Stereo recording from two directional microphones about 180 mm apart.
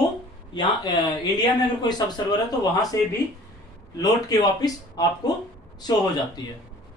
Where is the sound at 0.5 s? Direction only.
25° left (ahead or behind).